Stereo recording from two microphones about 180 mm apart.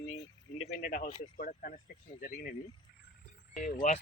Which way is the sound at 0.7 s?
55° left (ahead or behind).